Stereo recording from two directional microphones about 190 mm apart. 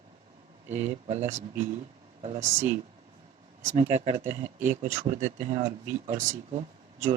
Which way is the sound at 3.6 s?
35° right (ahead or behind).